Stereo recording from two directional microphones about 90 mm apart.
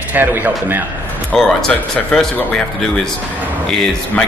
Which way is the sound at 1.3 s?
5° left (ahead or behind).